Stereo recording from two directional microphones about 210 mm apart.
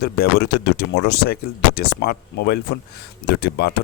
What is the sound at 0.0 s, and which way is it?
Speech, 50° left (ahead or behind).